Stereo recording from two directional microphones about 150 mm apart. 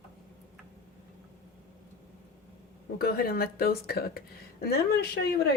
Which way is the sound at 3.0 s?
90° left.